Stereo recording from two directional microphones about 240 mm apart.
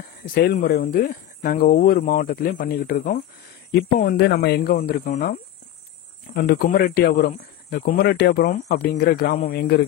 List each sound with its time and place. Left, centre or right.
0.2 s speech: left